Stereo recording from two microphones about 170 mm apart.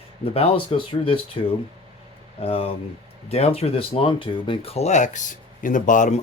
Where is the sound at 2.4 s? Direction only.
35° left (ahead or behind).